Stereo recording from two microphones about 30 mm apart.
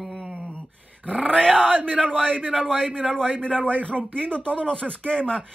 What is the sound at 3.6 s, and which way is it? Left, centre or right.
Speech, left.